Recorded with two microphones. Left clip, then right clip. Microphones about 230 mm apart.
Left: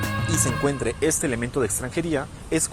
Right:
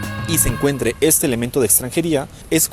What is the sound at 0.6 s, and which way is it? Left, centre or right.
Speech, right.